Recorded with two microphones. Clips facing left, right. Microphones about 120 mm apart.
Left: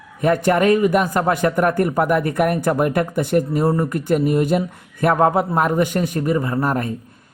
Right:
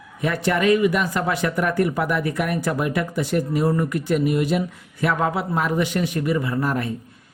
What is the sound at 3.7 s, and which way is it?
Speech, 35° left (ahead or behind).